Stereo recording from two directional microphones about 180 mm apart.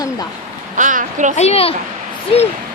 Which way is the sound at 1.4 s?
35° left (ahead or behind).